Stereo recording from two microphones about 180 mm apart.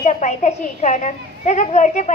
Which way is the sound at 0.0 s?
40° left (ahead or behind).